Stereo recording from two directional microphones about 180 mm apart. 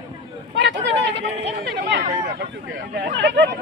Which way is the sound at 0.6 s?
75° right (ahead or behind).